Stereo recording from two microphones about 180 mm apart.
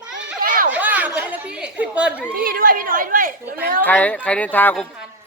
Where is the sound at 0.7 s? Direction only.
10° right (ahead or behind).